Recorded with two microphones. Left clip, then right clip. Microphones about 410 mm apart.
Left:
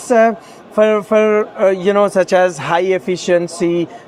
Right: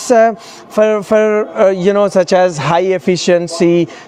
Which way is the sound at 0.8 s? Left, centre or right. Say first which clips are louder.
Right 1 dB; right.